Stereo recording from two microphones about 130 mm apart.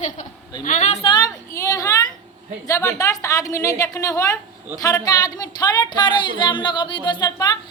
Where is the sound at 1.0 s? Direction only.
35° left (ahead or behind).